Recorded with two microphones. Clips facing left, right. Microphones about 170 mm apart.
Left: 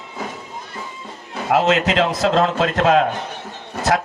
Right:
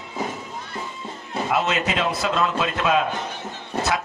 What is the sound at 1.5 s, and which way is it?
A man's voice, 75° left (ahead or behind).